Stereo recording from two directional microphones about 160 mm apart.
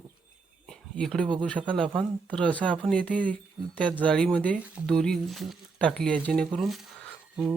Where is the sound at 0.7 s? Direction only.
5° left (ahead or behind).